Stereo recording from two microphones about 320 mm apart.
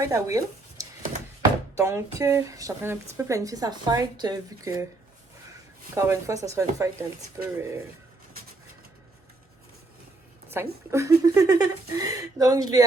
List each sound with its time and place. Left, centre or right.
0.0 s speech: centre
1.4 s a sound: centre
2.1 s a woman's voice: centre
5.9 s a woman's voice: centre
10.5 s a woman's voice: centre